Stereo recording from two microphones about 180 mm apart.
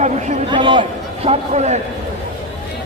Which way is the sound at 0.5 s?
25° right (ahead or behind).